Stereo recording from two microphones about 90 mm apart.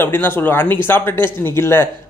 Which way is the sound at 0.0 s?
25° left (ahead or behind).